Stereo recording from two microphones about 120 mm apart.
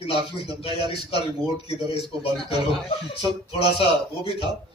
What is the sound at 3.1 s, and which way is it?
Speech, 50° left (ahead or behind).